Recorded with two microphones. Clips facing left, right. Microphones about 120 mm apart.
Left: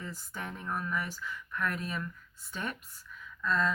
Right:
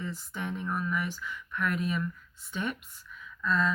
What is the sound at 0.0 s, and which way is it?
Speech, 40° left (ahead or behind).